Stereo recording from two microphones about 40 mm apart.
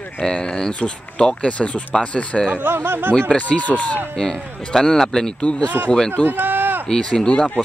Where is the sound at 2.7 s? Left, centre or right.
Right.